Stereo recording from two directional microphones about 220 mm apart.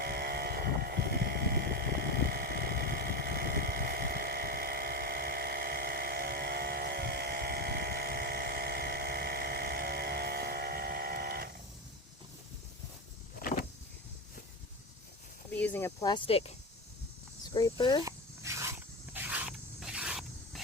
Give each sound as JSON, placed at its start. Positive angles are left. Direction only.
{"t": 0.0, "sound": "vehicle", "side_deg": -45}
{"t": 15.5, "sound": "speech", "side_deg": 10}
{"t": 18.0, "sound": "a sound", "side_deg": -15}